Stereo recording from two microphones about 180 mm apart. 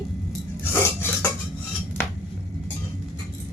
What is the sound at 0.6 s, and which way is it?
Filing, 10° left (ahead or behind).